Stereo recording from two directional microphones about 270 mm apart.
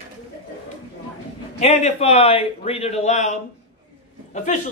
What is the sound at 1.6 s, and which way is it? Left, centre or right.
Speech, left.